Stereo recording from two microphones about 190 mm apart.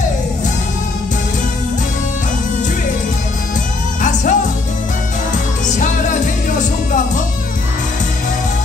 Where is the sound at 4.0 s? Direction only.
40° left (ahead or behind).